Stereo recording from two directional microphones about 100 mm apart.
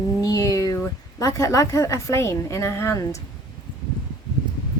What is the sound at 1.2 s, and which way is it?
A woman's voice, 35° left (ahead or behind).